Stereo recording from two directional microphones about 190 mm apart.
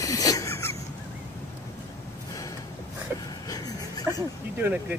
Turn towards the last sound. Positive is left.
turn(degrees=-10)  # may be behind; listen again after turning